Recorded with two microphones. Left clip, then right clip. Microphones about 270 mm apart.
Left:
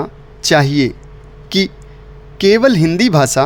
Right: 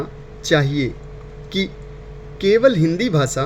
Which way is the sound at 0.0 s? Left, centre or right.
Left.